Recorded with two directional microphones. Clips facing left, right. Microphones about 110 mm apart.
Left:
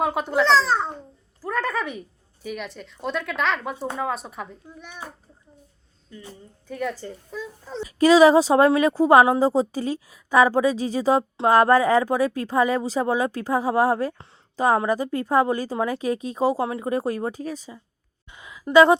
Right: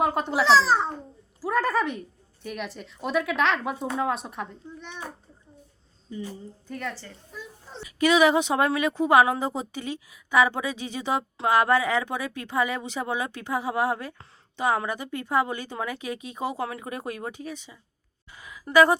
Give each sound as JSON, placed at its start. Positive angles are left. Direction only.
{"t": 0.0, "sound": "speech", "side_deg": 0}
{"t": 6.7, "sound": "speech", "side_deg": 5}
{"t": 7.8, "sound": "a woman's voice", "side_deg": 35}
{"t": 18.3, "sound": "speech", "side_deg": 20}